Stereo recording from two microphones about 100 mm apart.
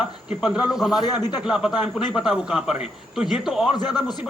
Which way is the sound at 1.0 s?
45° left (ahead or behind).